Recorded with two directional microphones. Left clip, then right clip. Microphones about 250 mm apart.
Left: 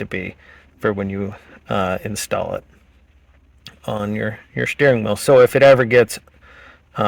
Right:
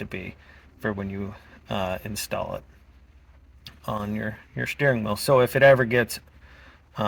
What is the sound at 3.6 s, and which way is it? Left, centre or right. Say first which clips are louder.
Speech: left 6 dB; left.